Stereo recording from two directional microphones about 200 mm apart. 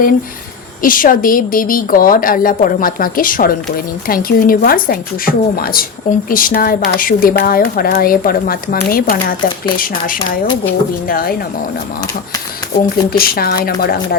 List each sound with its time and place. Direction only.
0.8 s a woman's voice: 45° left (ahead or behind)
12.8 s a woman's voice: 50° left (ahead or behind)